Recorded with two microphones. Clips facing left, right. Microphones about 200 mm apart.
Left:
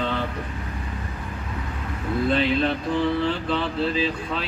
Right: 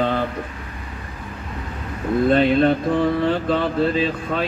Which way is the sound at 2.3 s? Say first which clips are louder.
Right 6 dB; 50° right (ahead or behind).